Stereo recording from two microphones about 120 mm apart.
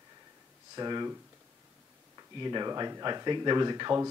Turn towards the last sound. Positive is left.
turn(degrees=-35)  # may be behind; listen again after turning